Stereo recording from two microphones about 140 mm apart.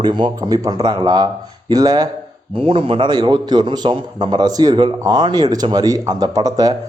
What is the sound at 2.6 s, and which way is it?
A man's voice, 40° right (ahead or behind).